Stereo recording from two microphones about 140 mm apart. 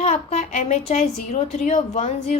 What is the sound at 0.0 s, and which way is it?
A woman's voice, 50° left (ahead or behind).